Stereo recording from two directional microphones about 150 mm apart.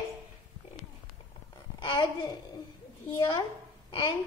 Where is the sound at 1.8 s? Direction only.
30° left (ahead or behind).